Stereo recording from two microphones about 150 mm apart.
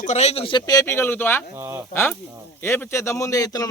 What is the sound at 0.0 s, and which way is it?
Speech, 50° left (ahead or behind).